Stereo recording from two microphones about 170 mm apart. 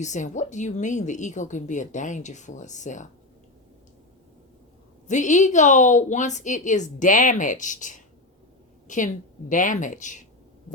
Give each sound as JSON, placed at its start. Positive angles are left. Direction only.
{"t": 0.0, "sound": "speech", "side_deg": 45}
{"t": 5.0, "sound": "speech", "side_deg": 45}